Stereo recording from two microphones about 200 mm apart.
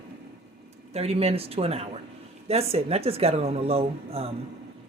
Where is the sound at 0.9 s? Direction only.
30° right (ahead or behind).